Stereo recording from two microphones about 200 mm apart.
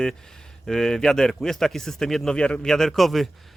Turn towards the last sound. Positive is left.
turn(degrees=0)  # may be behind; listen again after turning